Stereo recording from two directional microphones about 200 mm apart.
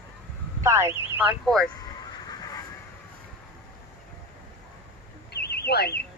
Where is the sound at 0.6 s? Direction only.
15° right (ahead or behind).